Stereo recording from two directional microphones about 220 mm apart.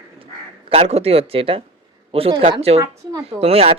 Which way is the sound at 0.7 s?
30° right (ahead or behind).